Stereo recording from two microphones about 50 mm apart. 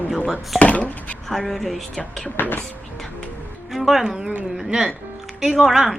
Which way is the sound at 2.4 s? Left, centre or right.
Left.